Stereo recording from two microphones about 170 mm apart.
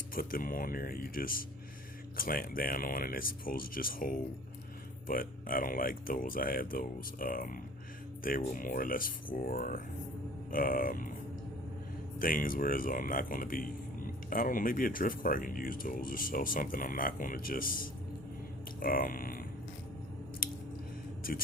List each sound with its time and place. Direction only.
0.1 s speech: 55° left (ahead or behind)
12.2 s speech: 55° left (ahead or behind)